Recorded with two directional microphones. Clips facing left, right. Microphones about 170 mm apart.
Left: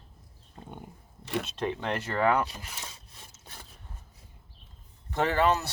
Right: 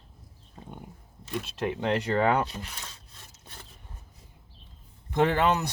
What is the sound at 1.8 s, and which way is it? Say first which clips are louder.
Speech: right 5 dB; 15° right (ahead or behind).